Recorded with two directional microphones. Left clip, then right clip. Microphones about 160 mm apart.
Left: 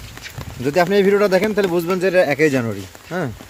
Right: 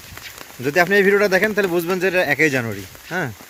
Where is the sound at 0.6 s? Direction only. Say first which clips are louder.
Even; centre (ahead or behind).